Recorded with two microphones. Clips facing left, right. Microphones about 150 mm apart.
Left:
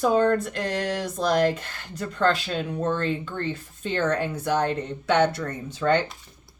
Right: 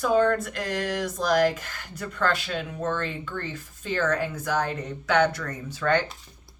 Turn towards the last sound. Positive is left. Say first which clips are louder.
# left 2 dB
turn(degrees=25)  # may be behind; listen again after turning